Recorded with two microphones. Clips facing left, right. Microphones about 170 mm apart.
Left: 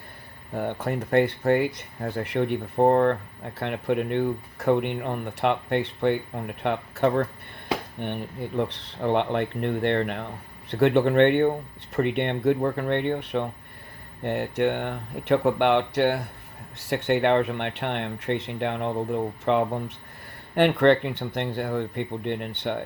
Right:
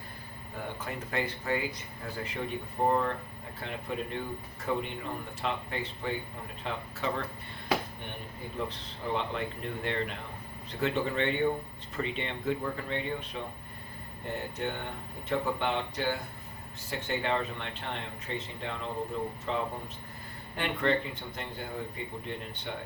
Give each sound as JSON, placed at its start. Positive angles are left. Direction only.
{"t": 0.5, "sound": "speech", "side_deg": 65}